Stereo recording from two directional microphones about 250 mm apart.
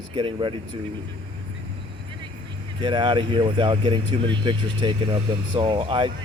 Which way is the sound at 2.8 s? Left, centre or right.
Centre.